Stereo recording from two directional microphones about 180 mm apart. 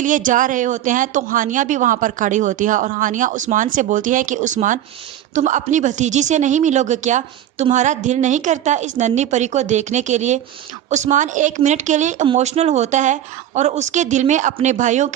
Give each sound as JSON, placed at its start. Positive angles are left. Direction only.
{"t": 0.0, "sound": "a woman's voice", "side_deg": -45}